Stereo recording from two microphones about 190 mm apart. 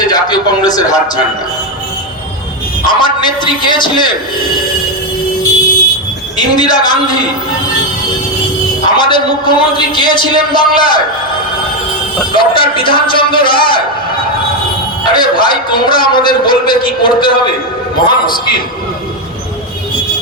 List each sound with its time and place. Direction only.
0.1 s a man's voice: 20° left (ahead or behind)
2.8 s a man's voice: 25° left (ahead or behind)
6.3 s a man's voice: 20° left (ahead or behind)
8.9 s a man's voice: 25° left (ahead or behind)
12.3 s a man's voice: 25° left (ahead or behind)
15.0 s a man's voice: 25° left (ahead or behind)